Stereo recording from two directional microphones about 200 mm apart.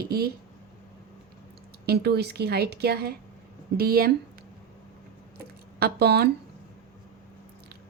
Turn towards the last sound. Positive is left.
turn(degrees=-55)  # may be behind; listen again after turning